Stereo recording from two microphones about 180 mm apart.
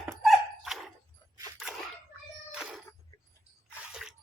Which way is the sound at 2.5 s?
5° right (ahead or behind).